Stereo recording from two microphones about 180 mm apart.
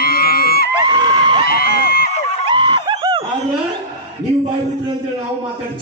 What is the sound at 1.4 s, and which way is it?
Speech, 60° left (ahead or behind).